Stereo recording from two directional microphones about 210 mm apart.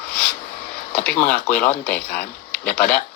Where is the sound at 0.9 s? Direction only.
5° left (ahead or behind).